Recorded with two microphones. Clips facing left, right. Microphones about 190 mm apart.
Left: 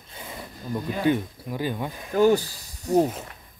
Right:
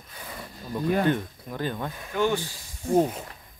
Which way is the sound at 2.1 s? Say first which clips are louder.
Left 7 dB; 40° left (ahead or behind).